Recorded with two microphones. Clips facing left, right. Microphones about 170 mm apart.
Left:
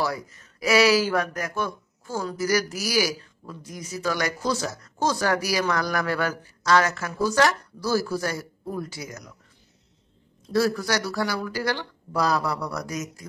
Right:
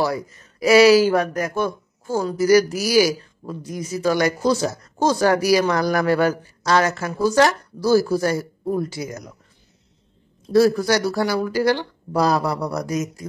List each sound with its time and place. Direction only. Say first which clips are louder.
0.0 s speech: right 5 dB; 30° right (ahead or behind)
10.5 s speech: right 7 dB; 30° right (ahead or behind)